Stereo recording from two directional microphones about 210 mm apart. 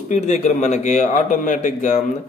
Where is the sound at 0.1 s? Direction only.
35° left (ahead or behind).